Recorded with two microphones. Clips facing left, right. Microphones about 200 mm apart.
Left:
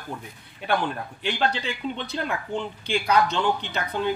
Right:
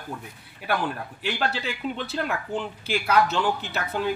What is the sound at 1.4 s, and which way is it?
Speech, 5° right (ahead or behind).